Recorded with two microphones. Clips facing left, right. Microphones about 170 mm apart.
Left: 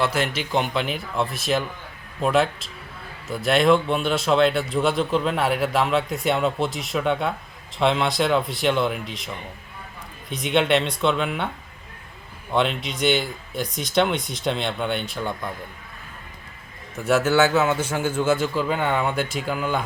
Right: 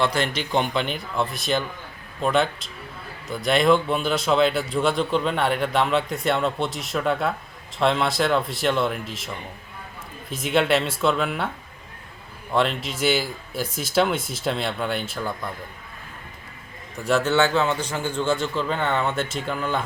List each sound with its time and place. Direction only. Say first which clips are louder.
0.0 s speech: even; 5° left (ahead or behind)
12.5 s speech: even; centre (ahead or behind)
17.0 s a man's voice: left 2 dB; 5° left (ahead or behind)